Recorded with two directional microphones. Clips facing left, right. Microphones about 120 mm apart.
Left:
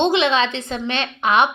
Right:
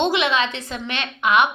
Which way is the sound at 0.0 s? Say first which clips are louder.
Left 3 dB; 30° left (ahead or behind).